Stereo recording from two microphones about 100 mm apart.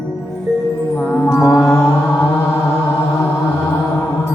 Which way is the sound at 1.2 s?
30° left (ahead or behind).